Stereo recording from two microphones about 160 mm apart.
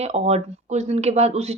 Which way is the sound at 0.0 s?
40° right (ahead or behind).